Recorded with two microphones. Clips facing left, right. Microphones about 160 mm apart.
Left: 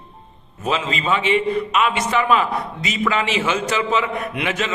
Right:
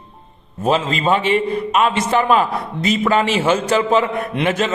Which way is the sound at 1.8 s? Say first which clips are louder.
Right 5 dB; 30° right (ahead or behind).